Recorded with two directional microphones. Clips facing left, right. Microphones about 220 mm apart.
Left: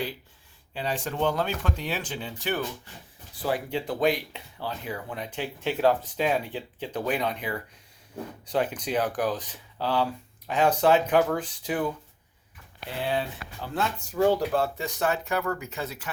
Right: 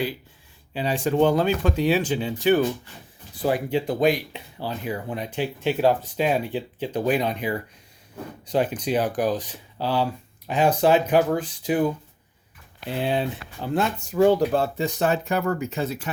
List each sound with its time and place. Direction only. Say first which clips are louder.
0.7 s speech: right 7 dB; 10° right (ahead or behind)
4.6 s speech: right 4 dB; 35° right (ahead or behind)
5.1 s speech: right 6 dB; 10° right (ahead or behind)
8.5 s speech: right 4 dB; 10° right (ahead or behind)
8.9 s speech: right 4 dB; 30° right (ahead or behind)
9.1 s speech: right 4 dB; 10° right (ahead or behind)
13.0 s speech: right 4 dB; 20° right (ahead or behind)